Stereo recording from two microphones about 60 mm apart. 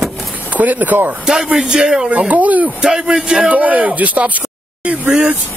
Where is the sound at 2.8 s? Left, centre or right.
Centre.